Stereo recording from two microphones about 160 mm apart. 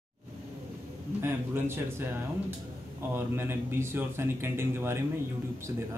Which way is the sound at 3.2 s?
15° right (ahead or behind).